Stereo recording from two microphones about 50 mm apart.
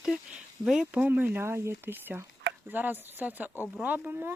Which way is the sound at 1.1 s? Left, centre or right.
Right.